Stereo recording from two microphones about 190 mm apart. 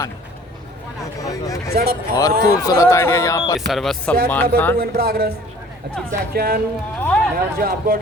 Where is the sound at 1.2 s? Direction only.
15° left (ahead or behind).